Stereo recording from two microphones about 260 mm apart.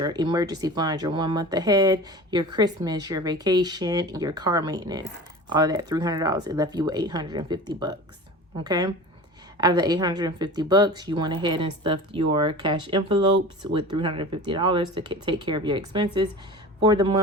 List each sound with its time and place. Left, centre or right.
0.0 s speech: centre